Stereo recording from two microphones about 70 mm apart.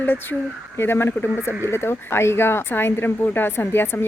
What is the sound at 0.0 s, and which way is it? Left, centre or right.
Speech, left.